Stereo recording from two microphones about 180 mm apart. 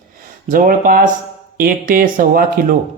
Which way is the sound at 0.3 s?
50° right (ahead or behind).